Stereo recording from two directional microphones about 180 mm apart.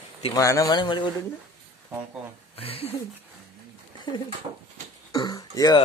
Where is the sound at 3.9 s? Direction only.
25° left (ahead or behind).